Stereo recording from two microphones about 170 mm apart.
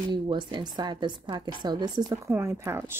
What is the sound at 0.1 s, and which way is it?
A woman's voice, 25° right (ahead or behind).